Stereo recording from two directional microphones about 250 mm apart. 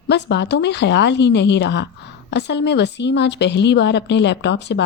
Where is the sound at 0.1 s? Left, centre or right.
Left.